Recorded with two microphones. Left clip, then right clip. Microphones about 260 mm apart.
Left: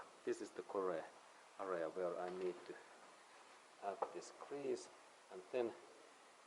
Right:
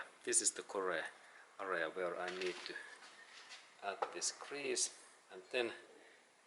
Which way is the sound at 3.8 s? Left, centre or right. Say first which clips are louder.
Right 4 dB; centre.